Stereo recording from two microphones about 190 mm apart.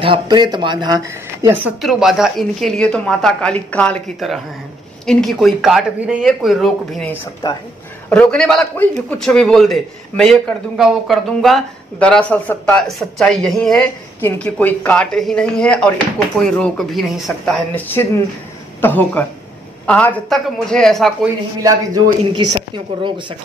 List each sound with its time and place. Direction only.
0.0 s speech: 25° right (ahead or behind)
1.8 s a man's voice: centre (ahead or behind)
21.5 s speech: 20° right (ahead or behind)